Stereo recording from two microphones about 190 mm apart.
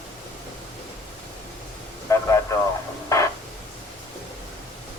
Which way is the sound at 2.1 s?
15° left (ahead or behind).